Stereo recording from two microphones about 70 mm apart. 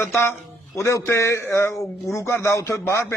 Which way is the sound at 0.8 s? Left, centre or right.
Left.